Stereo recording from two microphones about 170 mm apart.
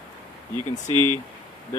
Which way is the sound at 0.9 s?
25° right (ahead or behind).